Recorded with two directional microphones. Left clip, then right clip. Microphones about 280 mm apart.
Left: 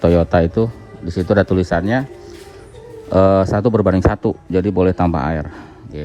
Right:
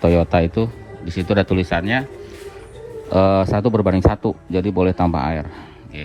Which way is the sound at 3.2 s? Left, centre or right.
Right.